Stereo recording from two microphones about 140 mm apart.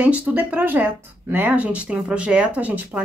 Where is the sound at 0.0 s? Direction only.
10° right (ahead or behind).